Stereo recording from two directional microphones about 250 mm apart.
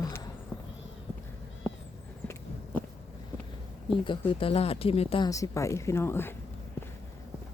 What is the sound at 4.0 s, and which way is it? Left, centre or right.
Speech, left.